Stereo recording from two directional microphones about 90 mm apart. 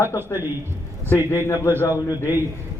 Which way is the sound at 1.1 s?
30° left (ahead or behind).